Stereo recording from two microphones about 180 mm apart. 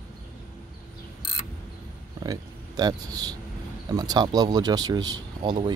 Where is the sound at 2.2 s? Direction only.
20° right (ahead or behind).